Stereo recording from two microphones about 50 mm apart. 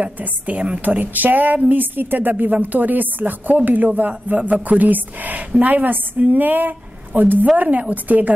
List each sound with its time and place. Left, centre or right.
0.0 s speech: right